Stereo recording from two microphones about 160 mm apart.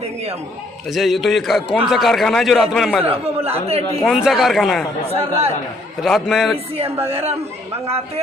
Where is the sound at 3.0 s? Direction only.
40° right (ahead or behind).